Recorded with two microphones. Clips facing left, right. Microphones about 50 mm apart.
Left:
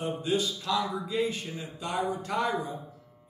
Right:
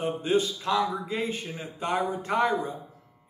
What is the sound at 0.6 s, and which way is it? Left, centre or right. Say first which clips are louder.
A man's voice: right 3 dB; right.